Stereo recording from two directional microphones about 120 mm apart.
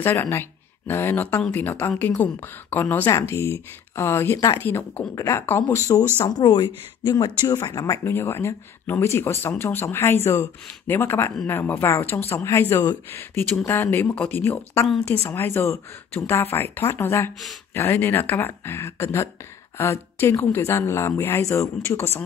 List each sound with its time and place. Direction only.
0.0 s speech: 20° left (ahead or behind)
6.2 s speech: 35° left (ahead or behind)